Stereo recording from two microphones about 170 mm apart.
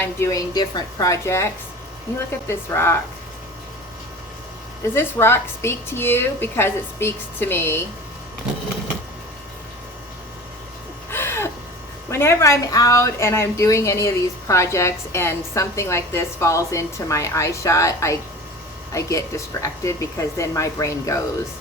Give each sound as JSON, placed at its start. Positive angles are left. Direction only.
{"t": 0.0, "sound": "a woman's voice", "side_deg": 15}
{"t": 2.5, "sound": "a woman's voice", "side_deg": 15}
{"t": 4.9, "sound": "a woman's voice", "side_deg": 15}
{"t": 11.1, "sound": "a sound", "side_deg": 15}
{"t": 12.1, "sound": "a woman's voice", "side_deg": 15}